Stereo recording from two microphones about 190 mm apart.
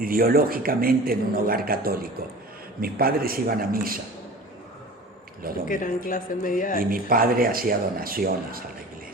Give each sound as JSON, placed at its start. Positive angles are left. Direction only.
{"t": 0.0, "sound": "a man's voice", "side_deg": -50}
{"t": 5.6, "sound": "speech", "side_deg": 45}
{"t": 6.7, "sound": "a man's voice", "side_deg": -50}